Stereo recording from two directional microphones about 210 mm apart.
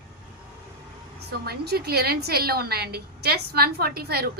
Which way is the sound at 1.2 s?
50° right (ahead or behind).